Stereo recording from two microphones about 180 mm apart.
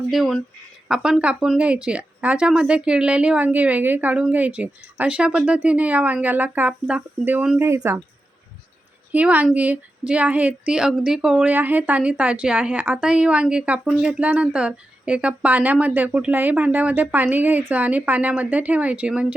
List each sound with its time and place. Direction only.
0.1 s a woman's voice: centre (ahead or behind)
9.1 s a woman's voice: 10° right (ahead or behind)